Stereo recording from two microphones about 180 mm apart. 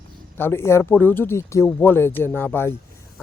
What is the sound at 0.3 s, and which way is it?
Speech, 15° left (ahead or behind).